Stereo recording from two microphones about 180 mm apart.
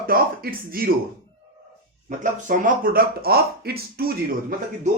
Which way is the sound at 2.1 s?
45° right (ahead or behind).